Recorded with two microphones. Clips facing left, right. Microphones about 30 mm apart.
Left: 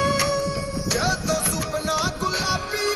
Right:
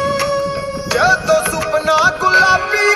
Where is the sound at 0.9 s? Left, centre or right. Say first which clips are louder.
Right 12 dB; right.